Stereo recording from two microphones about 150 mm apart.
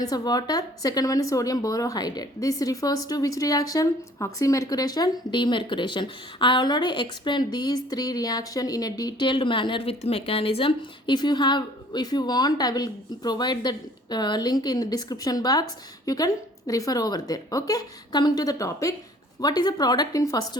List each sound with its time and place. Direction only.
0.0 s a woman's voice: 25° left (ahead or behind)